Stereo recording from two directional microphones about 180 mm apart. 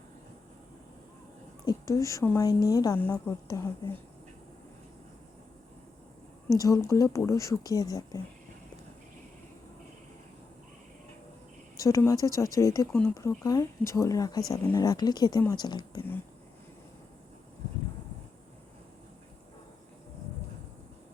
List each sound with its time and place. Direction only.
1.6 s a woman's voice: 20° left (ahead or behind)
6.6 s a woman's voice: 20° left (ahead or behind)
11.8 s a woman's voice: 15° left (ahead or behind)